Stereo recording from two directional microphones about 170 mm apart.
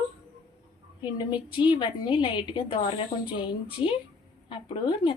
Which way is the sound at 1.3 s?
25° left (ahead or behind).